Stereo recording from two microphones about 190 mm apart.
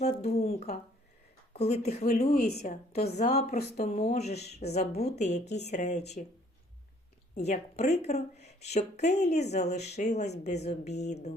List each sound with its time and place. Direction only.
0.0 s speech: 35° left (ahead or behind)
7.3 s speech: 35° left (ahead or behind)